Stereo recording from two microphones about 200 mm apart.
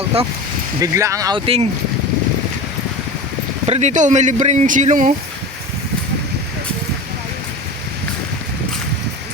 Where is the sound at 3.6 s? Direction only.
35° right (ahead or behind).